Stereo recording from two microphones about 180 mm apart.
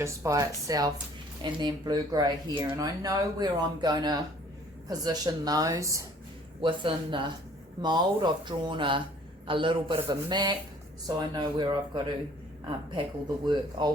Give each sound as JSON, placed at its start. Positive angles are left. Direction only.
{"t": 0.0, "sound": "speech", "side_deg": -15}
{"t": 6.6, "sound": "speech", "side_deg": -25}
{"t": 13.2, "sound": "speech", "side_deg": -25}